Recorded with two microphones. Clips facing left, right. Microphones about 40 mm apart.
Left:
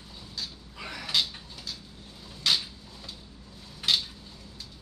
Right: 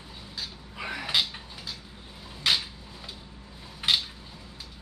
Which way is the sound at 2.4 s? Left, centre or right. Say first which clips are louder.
Right 1 dB; centre.